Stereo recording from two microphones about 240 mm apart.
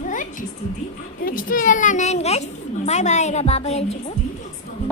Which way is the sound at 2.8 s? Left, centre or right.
Left.